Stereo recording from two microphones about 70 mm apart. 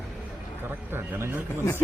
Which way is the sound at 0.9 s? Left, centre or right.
Right.